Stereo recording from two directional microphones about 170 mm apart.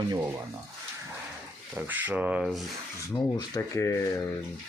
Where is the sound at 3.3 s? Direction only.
20° left (ahead or behind).